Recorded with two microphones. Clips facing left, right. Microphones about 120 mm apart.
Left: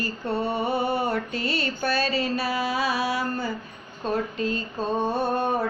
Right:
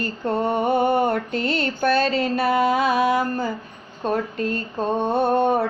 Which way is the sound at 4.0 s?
55° right (ahead or behind).